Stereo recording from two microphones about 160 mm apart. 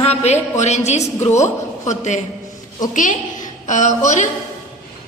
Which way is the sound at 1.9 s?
50° left (ahead or behind).